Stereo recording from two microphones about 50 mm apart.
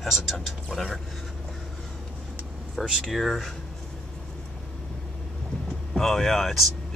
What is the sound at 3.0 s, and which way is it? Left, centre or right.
Speech, centre.